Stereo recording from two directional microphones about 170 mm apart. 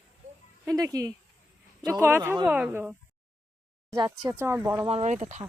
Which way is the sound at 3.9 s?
25° right (ahead or behind).